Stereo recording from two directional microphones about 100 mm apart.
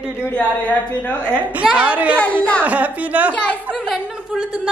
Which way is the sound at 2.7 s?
15° right (ahead or behind).